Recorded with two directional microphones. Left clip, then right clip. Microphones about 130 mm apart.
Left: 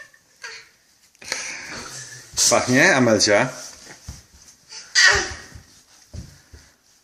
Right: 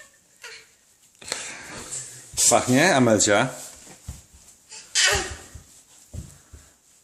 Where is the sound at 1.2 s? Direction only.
25° right (ahead or behind).